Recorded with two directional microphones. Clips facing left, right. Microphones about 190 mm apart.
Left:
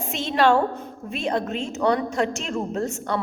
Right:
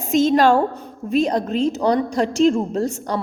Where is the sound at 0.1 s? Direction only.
40° right (ahead or behind).